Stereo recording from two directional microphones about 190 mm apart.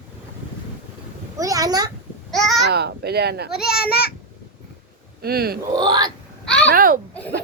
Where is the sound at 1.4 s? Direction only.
20° right (ahead or behind).